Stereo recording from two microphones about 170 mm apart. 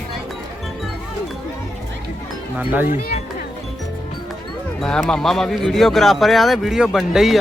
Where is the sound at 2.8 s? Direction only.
45° left (ahead or behind).